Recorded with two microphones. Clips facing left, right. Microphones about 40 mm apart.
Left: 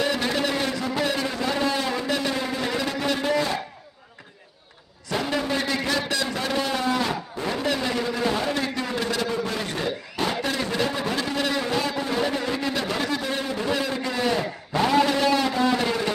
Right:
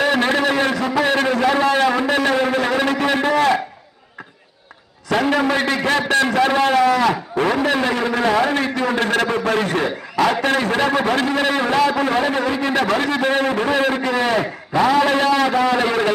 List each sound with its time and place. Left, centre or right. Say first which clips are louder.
0.0 s a sound: right 7 dB; right
1.0 s a man's voice: right 10 dB; right
2.0 s a sound: right 8 dB; right
5.0 s a man's voice: right 8 dB; right
6.7 s a man's voice: right 9 dB; right
8.6 s a man's voice: right 7 dB; right
8.9 s a man's voice: right 8 dB; right
11.9 s a man's voice: right 7 dB; right